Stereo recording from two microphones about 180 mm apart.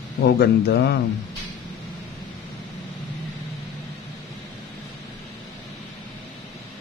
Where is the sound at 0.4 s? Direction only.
65° left (ahead or behind).